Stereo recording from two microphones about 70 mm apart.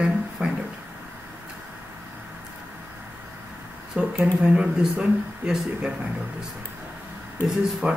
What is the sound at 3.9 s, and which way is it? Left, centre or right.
Speech, centre.